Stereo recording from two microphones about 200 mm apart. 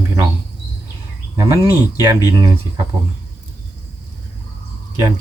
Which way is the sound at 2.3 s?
15° right (ahead or behind).